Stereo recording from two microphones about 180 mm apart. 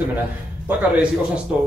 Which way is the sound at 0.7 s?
5° right (ahead or behind).